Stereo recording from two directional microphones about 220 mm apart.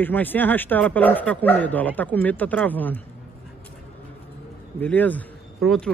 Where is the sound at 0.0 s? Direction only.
10° left (ahead or behind).